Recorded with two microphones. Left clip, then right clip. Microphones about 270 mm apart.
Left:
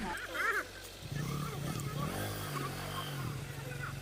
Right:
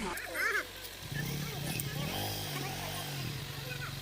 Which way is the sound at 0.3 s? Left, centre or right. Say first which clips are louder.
Right 1 dB; centre.